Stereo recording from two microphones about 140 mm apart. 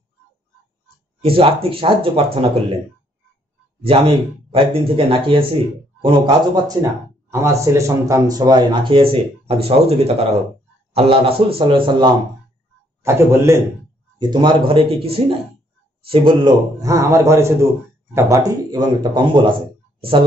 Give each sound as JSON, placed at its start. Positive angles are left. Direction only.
{"t": 1.2, "sound": "speech", "side_deg": -40}
{"t": 3.8, "sound": "speech", "side_deg": -40}
{"t": 13.0, "sound": "a man's voice", "side_deg": -20}
{"t": 14.1, "sound": "speech", "side_deg": -30}
{"t": 16.8, "sound": "a man's voice", "side_deg": -25}